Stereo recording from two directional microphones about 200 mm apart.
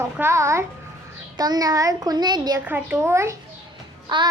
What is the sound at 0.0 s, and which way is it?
A child's voice, 15° right (ahead or behind).